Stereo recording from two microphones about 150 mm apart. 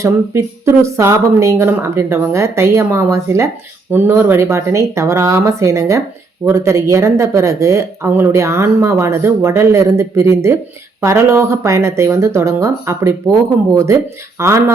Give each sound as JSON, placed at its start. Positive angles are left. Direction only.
{"t": 0.0, "sound": "speech", "side_deg": -15}